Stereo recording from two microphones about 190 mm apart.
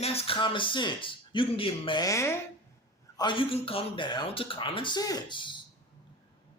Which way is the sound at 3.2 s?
25° left (ahead or behind).